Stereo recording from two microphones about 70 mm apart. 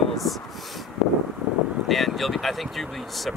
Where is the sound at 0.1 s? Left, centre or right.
Centre.